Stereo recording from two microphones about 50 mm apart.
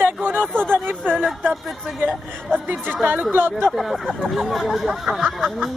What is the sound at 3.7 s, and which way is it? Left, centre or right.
Speech, centre.